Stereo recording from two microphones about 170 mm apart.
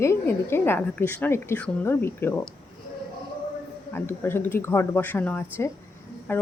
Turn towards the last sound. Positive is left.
turn(degrees=15)  # may be behind; listen again after turning